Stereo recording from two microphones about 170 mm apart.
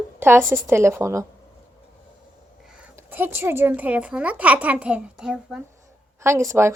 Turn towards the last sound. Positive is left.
turn(degrees=-15)  # may be behind; listen again after turning